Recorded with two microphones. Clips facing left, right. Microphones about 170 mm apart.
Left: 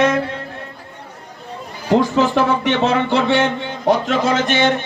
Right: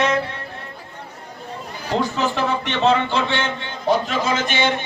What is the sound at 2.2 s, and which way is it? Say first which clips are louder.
Speech: left 6 dB; 65° left (ahead or behind).